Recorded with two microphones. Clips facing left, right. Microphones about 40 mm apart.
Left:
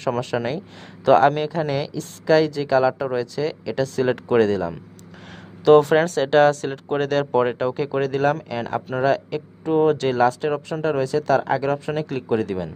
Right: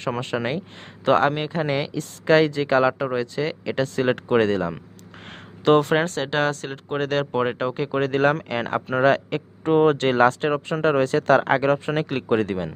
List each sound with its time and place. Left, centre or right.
0.0 s speech: right
8.1 s speech: right